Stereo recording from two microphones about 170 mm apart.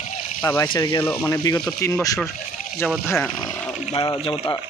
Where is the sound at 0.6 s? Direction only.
30° left (ahead or behind).